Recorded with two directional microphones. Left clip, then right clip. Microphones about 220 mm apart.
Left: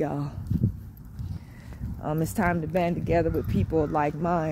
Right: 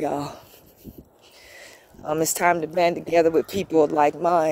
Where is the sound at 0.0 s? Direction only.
40° right (ahead or behind).